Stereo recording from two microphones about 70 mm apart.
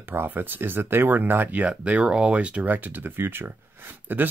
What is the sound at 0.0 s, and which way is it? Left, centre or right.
Speech, right.